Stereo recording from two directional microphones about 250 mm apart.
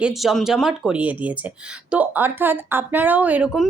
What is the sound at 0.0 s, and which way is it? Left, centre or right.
A woman's voice, centre.